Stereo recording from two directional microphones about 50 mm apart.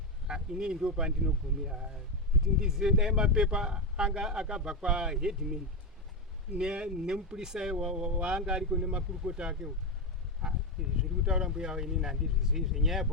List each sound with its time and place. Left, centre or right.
0.3 s speech: centre
6.6 s speech: centre
10.4 s speech: centre